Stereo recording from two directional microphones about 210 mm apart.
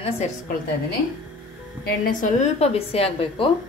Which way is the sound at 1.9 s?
40° left (ahead or behind).